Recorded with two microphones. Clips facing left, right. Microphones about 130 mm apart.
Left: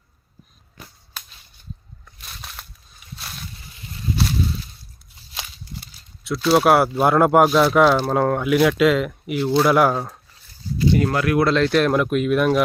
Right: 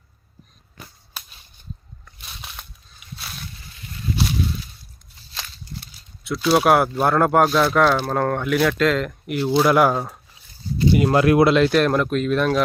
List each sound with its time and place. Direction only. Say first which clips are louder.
2.2 s a sound: even; centre (ahead or behind)
5.7 s speech: right 1 dB; centre (ahead or behind)
10.8 s speech: right 2 dB; 20° right (ahead or behind)
11.4 s speech: right 1 dB; 10° right (ahead or behind); by 12.6 s 10° left (ahead or behind)